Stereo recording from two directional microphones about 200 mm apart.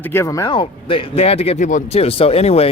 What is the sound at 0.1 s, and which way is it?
Speech, 15° left (ahead or behind).